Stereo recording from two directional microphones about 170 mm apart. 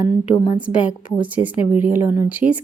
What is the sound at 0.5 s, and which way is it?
A woman's voice, 5° right (ahead or behind).